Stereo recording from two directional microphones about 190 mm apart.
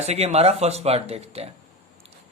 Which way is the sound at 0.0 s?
35° right (ahead or behind).